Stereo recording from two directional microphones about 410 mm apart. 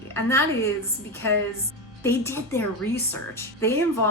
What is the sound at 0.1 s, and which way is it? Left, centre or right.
Speech, centre.